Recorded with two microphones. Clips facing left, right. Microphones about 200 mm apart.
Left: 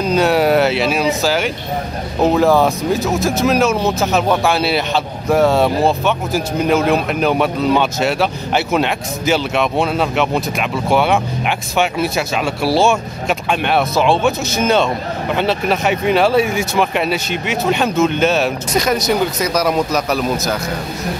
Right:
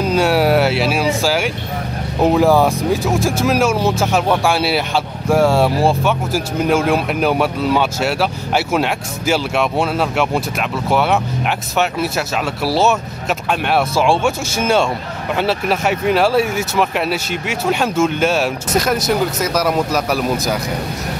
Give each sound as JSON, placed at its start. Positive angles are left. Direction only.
{"t": 0.0, "sound": "speech", "side_deg": -5}